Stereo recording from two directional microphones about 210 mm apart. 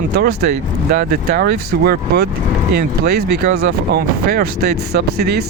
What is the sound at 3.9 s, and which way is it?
Speech, 45° right (ahead or behind).